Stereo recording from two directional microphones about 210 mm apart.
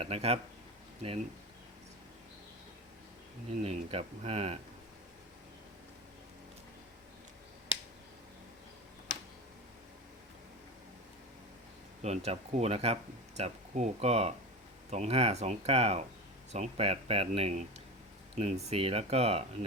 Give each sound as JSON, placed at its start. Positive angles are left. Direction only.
{"t": 0.0, "sound": "speech", "side_deg": -30}
{"t": 3.6, "sound": "speech", "side_deg": -30}
{"t": 12.0, "sound": "speech", "side_deg": -30}